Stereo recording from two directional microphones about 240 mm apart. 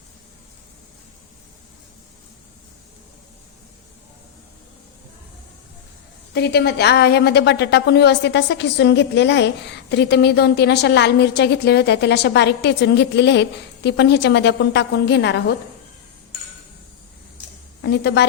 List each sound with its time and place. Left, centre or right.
6.3 s a woman's voice: left
17.8 s a woman's voice: left